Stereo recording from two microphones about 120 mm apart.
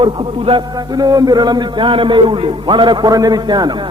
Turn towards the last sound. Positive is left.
turn(degrees=-35)  # may be behind; listen again after turning